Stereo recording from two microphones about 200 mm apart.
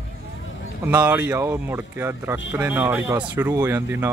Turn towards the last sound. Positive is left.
turn(degrees=-10)  # may be behind; listen again after turning